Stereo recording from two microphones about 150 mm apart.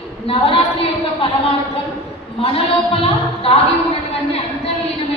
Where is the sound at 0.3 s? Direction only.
35° left (ahead or behind).